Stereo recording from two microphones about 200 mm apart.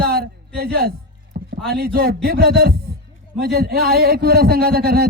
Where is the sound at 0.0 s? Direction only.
50° right (ahead or behind).